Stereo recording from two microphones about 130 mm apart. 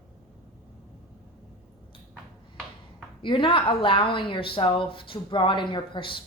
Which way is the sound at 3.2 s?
40° left (ahead or behind).